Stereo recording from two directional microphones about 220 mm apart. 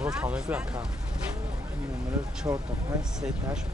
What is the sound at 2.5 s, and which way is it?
Speech, 15° right (ahead or behind).